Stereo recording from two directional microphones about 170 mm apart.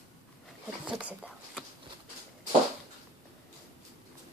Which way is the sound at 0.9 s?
5° right (ahead or behind).